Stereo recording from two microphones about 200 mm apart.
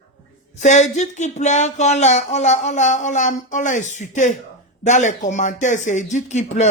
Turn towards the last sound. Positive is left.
turn(degrees=35)  # may be behind; listen again after turning